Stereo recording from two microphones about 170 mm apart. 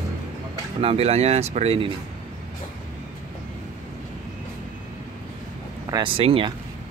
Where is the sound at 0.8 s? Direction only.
35° right (ahead or behind).